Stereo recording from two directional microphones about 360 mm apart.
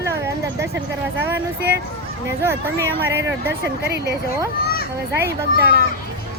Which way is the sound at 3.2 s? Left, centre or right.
Right.